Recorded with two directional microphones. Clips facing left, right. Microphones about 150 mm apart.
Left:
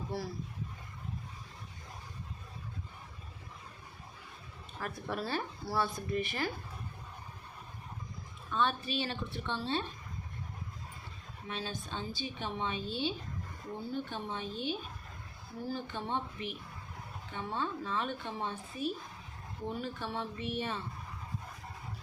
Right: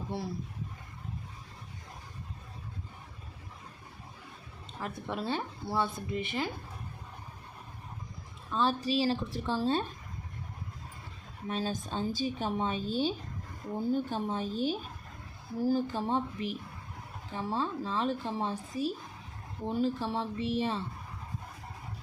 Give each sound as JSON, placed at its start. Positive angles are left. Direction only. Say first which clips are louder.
{"t": 0.1, "sound": "speech", "louder": "right 1 dB", "side_deg": -25}
{"t": 4.8, "sound": "speech", "louder": "right 1 dB", "side_deg": -20}
{"t": 8.4, "sound": "a woman's voice", "louder": "right 3 dB", "side_deg": -35}
{"t": 11.4, "sound": "a woman's voice", "louder": "right 6 dB", "side_deg": -40}